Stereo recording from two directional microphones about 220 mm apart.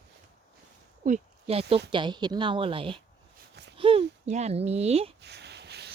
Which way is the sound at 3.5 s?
50° right (ahead or behind).